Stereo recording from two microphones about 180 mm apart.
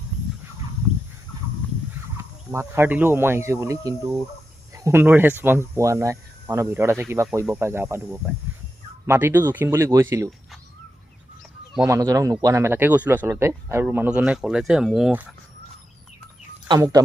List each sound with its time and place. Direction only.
2.1 s speech: 15° right (ahead or behind)
11.9 s speech: 20° right (ahead or behind)
16.6 s speech: 20° right (ahead or behind)